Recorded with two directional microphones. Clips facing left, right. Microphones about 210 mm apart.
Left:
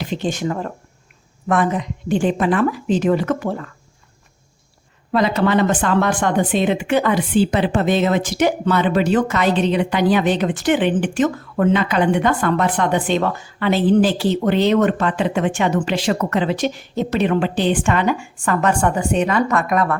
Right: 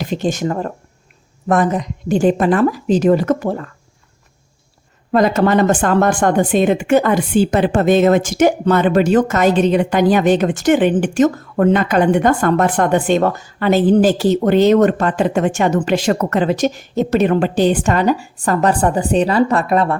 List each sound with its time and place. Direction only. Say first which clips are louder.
0.0 s a woman's voice: right 3 dB; 45° right (ahead or behind)
5.1 s speech: right 3 dB; 45° right (ahead or behind); by 20.0 s 30° right (ahead or behind)